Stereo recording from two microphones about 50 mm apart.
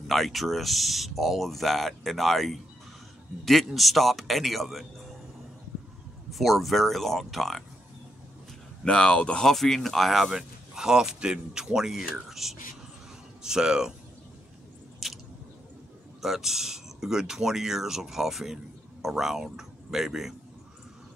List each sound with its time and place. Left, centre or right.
0.0 s speech: centre
6.3 s speech: centre
8.8 s speech: centre
9.5 s speech: centre
15.0 s a sound: centre
16.2 s speech: centre